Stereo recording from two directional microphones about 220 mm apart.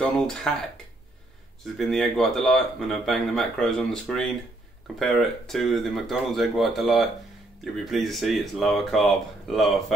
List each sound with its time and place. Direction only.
0.0 s speech: 5° left (ahead or behind)
1.8 s speech: centre (ahead or behind)